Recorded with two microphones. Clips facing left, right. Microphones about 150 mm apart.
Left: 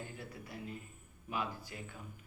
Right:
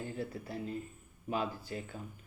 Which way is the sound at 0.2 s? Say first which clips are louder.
Right 7 dB; 30° right (ahead or behind).